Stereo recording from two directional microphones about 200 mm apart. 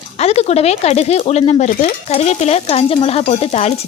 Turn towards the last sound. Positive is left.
turn(degrees=35)  # may be behind; listen again after turning